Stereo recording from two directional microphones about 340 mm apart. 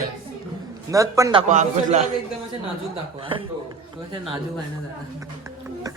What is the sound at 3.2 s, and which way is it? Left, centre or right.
Speech, centre.